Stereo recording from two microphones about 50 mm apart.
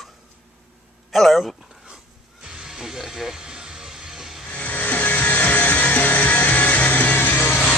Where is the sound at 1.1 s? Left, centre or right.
Centre.